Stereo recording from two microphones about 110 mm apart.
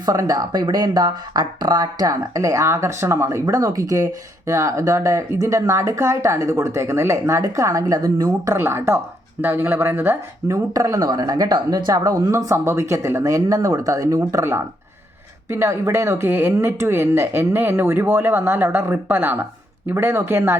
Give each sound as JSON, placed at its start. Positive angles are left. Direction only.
{"t": 0.0, "sound": "speech", "side_deg": -30}
{"t": 8.5, "sound": "speech", "side_deg": -20}